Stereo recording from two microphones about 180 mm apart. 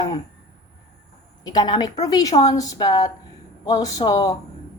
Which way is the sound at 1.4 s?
25° left (ahead or behind).